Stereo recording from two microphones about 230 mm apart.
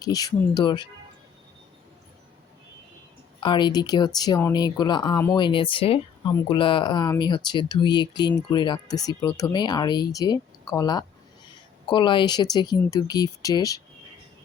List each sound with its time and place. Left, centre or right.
0.0 s speech: centre
3.4 s speech: centre